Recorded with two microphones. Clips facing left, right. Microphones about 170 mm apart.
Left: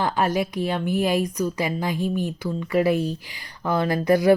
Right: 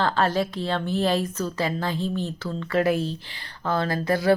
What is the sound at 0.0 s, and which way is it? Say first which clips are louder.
A woman's voice: even; 15° left (ahead or behind).